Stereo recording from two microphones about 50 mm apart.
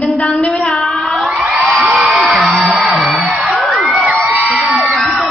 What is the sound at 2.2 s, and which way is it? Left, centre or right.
Music, centre.